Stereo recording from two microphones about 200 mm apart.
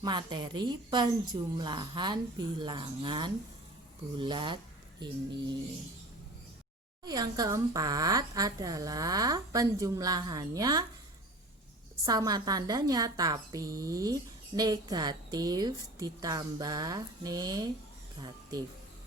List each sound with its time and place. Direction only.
0.0 s a woman's voice: 20° right (ahead or behind)
7.0 s a woman's voice: 20° right (ahead or behind)
12.0 s a woman's voice: 20° right (ahead or behind)